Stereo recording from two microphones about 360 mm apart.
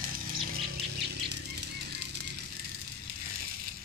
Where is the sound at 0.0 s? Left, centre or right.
Right.